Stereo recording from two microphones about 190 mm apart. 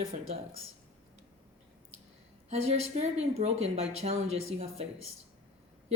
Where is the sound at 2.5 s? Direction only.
35° right (ahead or behind).